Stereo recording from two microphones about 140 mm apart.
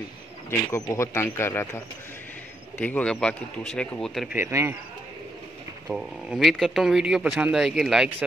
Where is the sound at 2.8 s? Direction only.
10° left (ahead or behind).